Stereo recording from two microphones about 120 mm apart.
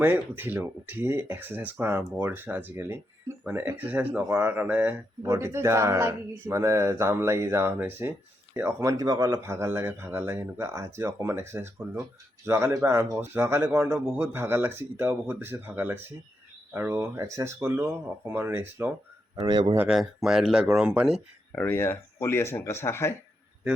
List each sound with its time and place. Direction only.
0.0 s speech: 15° right (ahead or behind)
19.5 s speech: 40° right (ahead or behind)
19.9 s speech: 5° right (ahead or behind)
21.5 s speech: 20° left (ahead or behind)